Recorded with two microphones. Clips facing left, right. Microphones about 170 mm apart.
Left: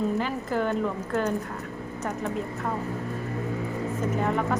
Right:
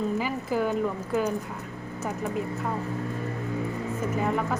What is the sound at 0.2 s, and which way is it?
Speech, 5° right (ahead or behind).